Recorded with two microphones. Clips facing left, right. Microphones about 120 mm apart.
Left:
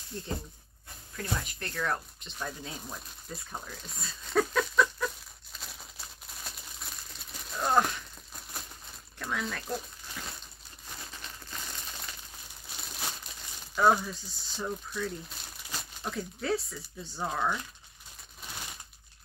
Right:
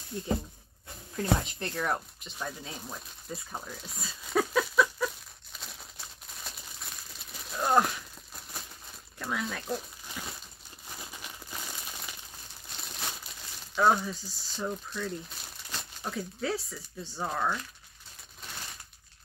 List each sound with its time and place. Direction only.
1.1 s speech: 20° right (ahead or behind)
2.2 s speech: centre (ahead or behind)
5.6 s crumpling: centre (ahead or behind)
9.2 s speech: 5° right (ahead or behind)
11.1 s crumpling: 10° right (ahead or behind)
16.0 s speech: centre (ahead or behind)